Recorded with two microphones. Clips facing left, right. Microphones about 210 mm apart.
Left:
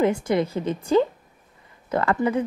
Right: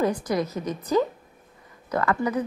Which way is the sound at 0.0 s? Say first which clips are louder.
Left 3 dB; 25° left (ahead or behind).